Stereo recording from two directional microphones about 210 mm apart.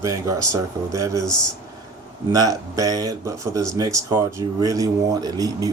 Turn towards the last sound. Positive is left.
turn(degrees=-15)  # may be behind; listen again after turning